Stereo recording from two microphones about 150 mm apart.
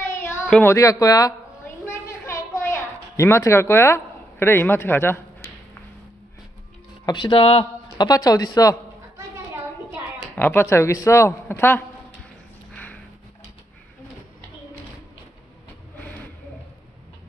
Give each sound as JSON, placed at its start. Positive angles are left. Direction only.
{"t": 0.5, "sound": "speech", "side_deg": 10}
{"t": 0.7, "sound": "speech", "side_deg": 20}
{"t": 1.9, "sound": "a sound", "side_deg": 20}
{"t": 7.1, "sound": "speech", "side_deg": 35}
{"t": 8.1, "sound": "speech", "side_deg": 25}
{"t": 10.3, "sound": "speech", "side_deg": 15}
{"t": 12.7, "sound": "a sound", "side_deg": 10}